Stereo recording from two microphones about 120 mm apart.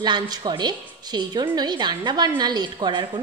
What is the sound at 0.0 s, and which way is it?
A woman's voice, 35° right (ahead or behind).